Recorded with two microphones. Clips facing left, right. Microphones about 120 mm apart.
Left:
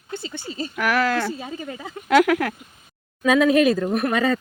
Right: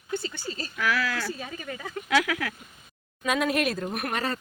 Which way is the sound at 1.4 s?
25° left (ahead or behind).